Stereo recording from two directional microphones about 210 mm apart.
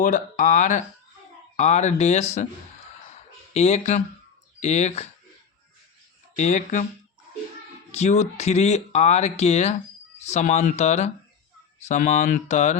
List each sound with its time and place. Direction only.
0.0 s speech: 35° left (ahead or behind)
3.0 s a sound: 30° left (ahead or behind)
4.6 s speech: 30° left (ahead or behind)
6.3 s speech: 35° left (ahead or behind)
7.9 s speech: 30° left (ahead or behind)